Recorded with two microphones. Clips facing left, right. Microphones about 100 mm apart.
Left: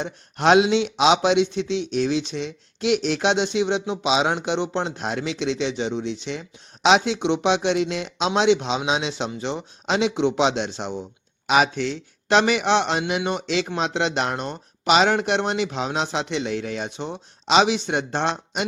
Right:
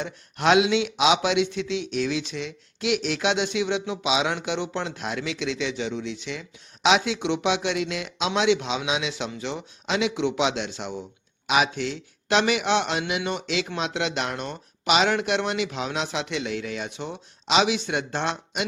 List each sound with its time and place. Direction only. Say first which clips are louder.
0.0 s a man's voice: left 3 dB; 35° left (ahead or behind)
11.4 s speech: left 4 dB; 40° left (ahead or behind)